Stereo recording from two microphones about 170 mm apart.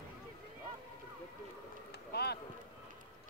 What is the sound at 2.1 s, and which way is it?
Speech, 75° left (ahead or behind).